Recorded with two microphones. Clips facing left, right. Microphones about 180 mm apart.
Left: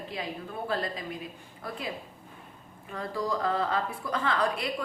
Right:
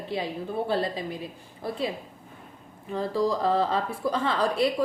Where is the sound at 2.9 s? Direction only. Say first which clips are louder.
Right 6 dB; 30° right (ahead or behind).